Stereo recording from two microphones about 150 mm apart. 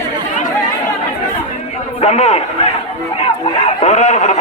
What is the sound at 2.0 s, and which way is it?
Speech, 45° left (ahead or behind).